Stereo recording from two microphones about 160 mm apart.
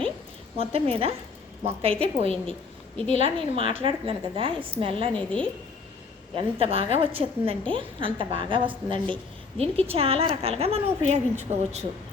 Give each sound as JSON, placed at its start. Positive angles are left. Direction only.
{"t": 0.5, "sound": "a woman's voice", "side_deg": -35}
{"t": 3.1, "sound": "a woman's voice", "side_deg": 45}
{"t": 3.5, "sound": "a woman's voice", "side_deg": -35}
{"t": 5.1, "sound": "a woman's voice", "side_deg": 10}
{"t": 6.3, "sound": "a woman's voice", "side_deg": -35}